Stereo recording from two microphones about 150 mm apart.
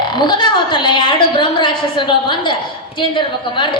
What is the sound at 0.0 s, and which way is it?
A woman's voice, 30° left (ahead or behind).